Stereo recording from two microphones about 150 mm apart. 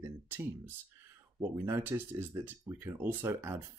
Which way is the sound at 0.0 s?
15° right (ahead or behind).